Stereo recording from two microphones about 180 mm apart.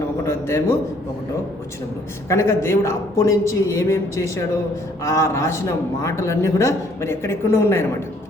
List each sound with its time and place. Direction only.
0.3 s a man's voice: 15° left (ahead or behind)
2.3 s a man's voice: 15° left (ahead or behind)